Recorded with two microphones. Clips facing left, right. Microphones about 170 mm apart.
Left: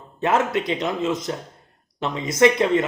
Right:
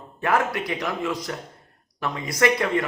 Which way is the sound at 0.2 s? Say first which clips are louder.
Left 3 dB; 20° left (ahead or behind).